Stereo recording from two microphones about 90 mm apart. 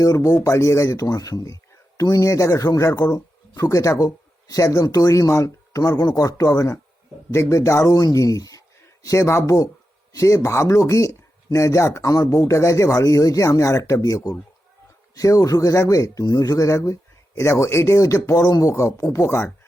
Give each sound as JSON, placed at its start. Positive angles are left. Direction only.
{"t": 0.0, "sound": "speech", "side_deg": 40}